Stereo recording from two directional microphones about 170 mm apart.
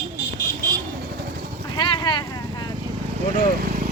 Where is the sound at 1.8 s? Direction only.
25° left (ahead or behind).